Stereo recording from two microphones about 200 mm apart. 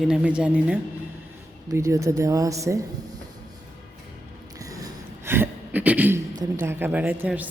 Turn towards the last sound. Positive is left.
turn(degrees=-5)  # may be behind; listen again after turning